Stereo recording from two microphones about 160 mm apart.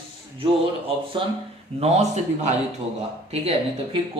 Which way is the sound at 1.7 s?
40° right (ahead or behind).